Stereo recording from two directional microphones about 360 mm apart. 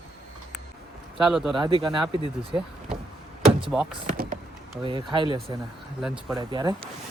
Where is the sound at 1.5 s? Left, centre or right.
Centre.